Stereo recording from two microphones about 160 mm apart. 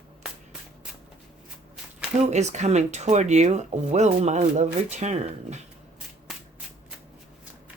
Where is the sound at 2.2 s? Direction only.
45° right (ahead or behind).